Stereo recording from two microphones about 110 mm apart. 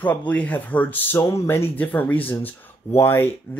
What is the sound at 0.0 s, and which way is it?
Speech, 15° left (ahead or behind).